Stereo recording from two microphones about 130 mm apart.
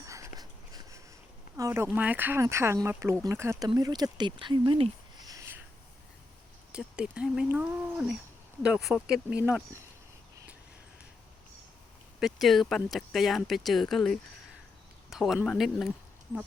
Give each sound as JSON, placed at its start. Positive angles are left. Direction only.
{"t": 0.0, "sound": "dog", "side_deg": -25}
{"t": 1.5, "sound": "speech", "side_deg": -20}
{"t": 3.8, "sound": "speech", "side_deg": -30}
{"t": 6.7, "sound": "speech", "side_deg": -5}
{"t": 12.2, "sound": "speech", "side_deg": 0}